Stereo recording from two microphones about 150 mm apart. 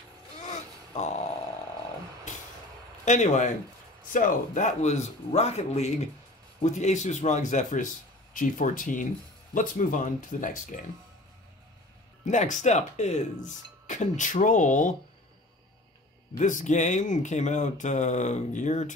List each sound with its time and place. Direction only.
0.5 s a sound: 50° left (ahead or behind)
3.1 s a man's voice: 55° left (ahead or behind)
12.3 s a man's voice: 55° left (ahead or behind)
16.3 s speech: 55° left (ahead or behind)